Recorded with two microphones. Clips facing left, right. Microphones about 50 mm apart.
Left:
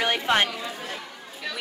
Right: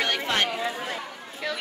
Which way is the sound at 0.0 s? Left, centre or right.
Centre.